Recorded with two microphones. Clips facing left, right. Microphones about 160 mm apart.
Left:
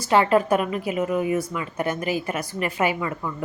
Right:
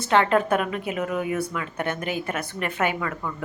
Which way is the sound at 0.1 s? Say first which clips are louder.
Left 2 dB; 5° left (ahead or behind).